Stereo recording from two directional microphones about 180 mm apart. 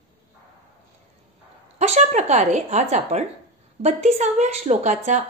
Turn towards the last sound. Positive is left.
turn(degrees=-40)  # may be behind; listen again after turning